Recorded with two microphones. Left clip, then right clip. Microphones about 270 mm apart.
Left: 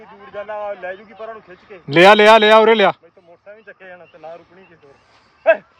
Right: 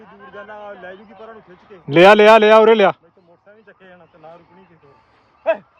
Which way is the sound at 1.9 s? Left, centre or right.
Centre.